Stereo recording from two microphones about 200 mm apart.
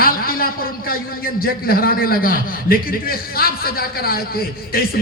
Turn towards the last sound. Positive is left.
turn(degrees=50)  # may be behind; listen again after turning